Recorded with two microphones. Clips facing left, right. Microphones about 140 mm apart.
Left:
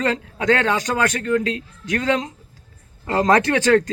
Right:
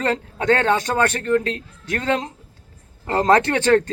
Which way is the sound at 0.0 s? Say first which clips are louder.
Even; 30° right (ahead or behind).